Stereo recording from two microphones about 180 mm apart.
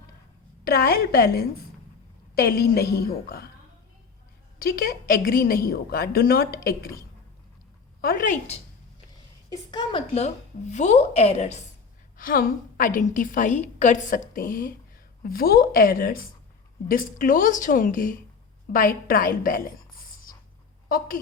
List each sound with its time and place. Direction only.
0.6 s a woman's voice: 55° left (ahead or behind)
4.6 s a woman's voice: 55° left (ahead or behind)
8.0 s a woman's voice: 50° left (ahead or behind)
9.5 s a woman's voice: 25° left (ahead or behind)
10.2 s a woman's voice: 40° left (ahead or behind)
12.1 s a woman's voice: 50° left (ahead or behind)